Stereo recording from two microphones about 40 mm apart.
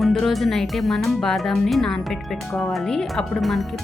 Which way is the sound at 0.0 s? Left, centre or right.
Centre.